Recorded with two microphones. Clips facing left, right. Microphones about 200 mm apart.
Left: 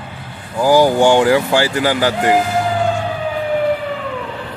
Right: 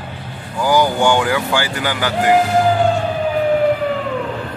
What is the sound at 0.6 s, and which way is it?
Speech, 30° left (ahead or behind).